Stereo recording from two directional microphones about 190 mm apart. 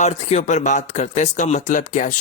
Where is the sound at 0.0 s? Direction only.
35° left (ahead or behind).